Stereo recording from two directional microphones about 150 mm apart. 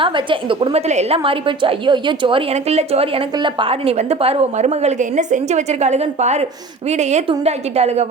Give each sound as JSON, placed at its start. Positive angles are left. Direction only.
{"t": 0.0, "sound": "a woman's voice", "side_deg": -35}